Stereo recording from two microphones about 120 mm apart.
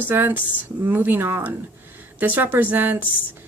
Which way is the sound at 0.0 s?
15° right (ahead or behind).